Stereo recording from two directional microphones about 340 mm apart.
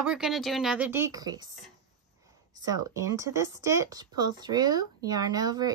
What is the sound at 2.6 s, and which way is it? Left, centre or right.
Speech, centre.